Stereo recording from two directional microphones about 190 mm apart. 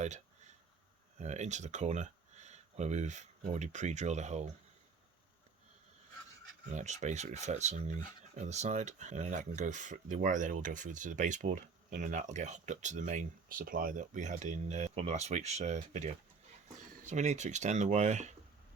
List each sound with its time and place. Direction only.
0.0 s a sound: 40° right (ahead or behind)
1.2 s speech: 35° right (ahead or behind)
6.7 s speech: 40° right (ahead or behind)